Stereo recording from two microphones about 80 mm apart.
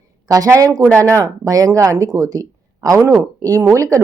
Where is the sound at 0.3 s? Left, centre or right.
Right.